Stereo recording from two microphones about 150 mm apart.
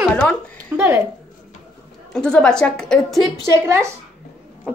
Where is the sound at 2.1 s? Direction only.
5° left (ahead or behind).